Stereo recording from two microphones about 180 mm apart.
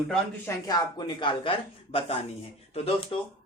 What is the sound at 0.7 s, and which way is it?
Speech, 25° left (ahead or behind).